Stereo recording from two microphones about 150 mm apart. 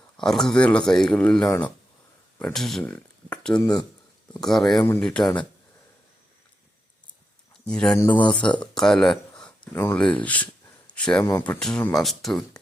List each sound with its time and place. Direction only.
0.2 s speech: 5° left (ahead or behind)
2.4 s speech: 5° left (ahead or behind)
7.6 s speech: 5° left (ahead or behind)